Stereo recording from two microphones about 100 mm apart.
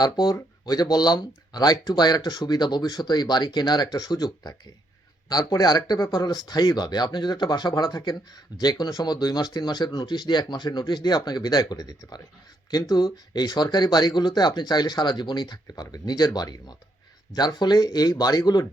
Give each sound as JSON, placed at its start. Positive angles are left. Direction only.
{"t": 0.0, "sound": "speech", "side_deg": 40}